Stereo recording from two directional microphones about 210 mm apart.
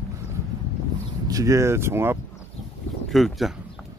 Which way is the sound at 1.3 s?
15° right (ahead or behind).